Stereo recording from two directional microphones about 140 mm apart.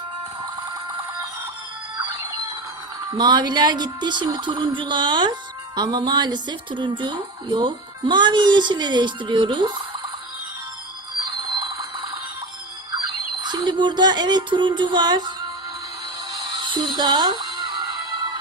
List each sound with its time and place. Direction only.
3.2 s speech: 30° right (ahead or behind)
11.2 s train: 30° right (ahead or behind)
13.4 s a sound: 30° right (ahead or behind)
16.3 s music: 35° right (ahead or behind)